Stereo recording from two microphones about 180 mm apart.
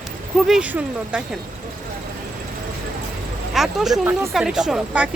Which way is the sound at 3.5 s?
Centre (ahead or behind).